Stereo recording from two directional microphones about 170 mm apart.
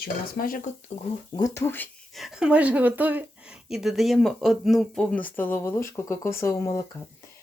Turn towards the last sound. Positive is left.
turn(degrees=20)  # may be behind; listen again after turning